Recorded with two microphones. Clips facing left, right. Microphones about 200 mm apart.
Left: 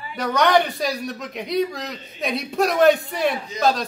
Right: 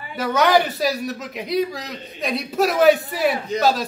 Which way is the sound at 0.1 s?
5° right (ahead or behind).